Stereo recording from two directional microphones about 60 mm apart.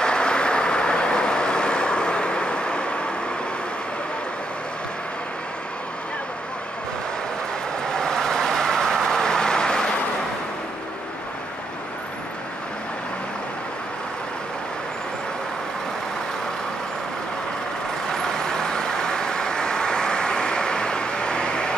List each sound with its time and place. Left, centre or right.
0.0 s vehicle: centre
7.9 s vehicle: centre
18.0 s vehicle: centre